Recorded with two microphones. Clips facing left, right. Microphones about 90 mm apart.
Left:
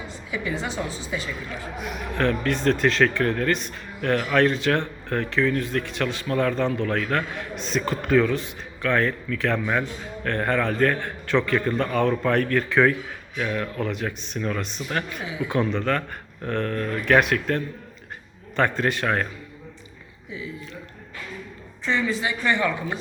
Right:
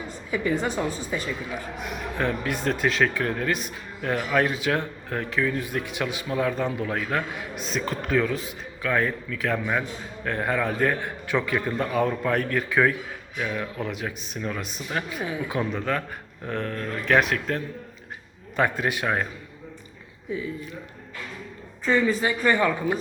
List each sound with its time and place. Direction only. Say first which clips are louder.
0.3 s a woman's voice: right 4 dB; 45° right (ahead or behind)
2.1 s speech: left 4 dB; 10° right (ahead or behind)
21.8 s a woman's voice: right 3 dB; 45° right (ahead or behind)